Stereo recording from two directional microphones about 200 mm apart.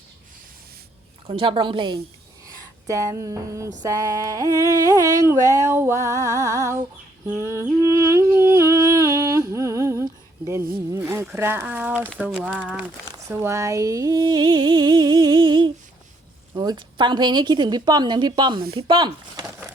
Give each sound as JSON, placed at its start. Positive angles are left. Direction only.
{"t": 1.3, "sound": "humming", "side_deg": -25}
{"t": 2.8, "sound": "a sound", "side_deg": -15}
{"t": 7.6, "sound": "humming", "side_deg": -15}
{"t": 12.2, "sound": "speech", "side_deg": -5}
{"t": 13.1, "sound": "humming", "side_deg": -15}
{"t": 18.8, "sound": "speech", "side_deg": -25}